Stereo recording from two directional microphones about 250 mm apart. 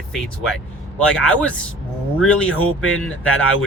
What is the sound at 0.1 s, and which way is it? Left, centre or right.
Speech, centre.